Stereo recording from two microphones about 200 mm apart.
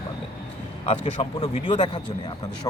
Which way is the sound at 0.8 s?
30° left (ahead or behind).